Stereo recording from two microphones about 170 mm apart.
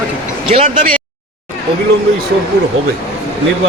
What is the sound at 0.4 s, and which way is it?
Speech, 30° right (ahead or behind).